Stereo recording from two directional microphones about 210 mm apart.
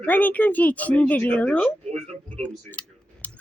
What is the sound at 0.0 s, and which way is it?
Speech, 10° left (ahead or behind).